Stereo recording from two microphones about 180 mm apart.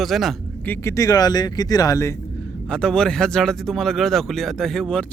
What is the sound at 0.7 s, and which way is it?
Speech, 15° left (ahead or behind).